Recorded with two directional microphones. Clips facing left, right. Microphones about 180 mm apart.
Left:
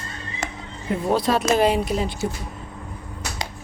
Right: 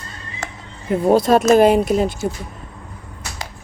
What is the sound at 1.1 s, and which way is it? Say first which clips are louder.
Speech: right 7 dB; 45° right (ahead or behind).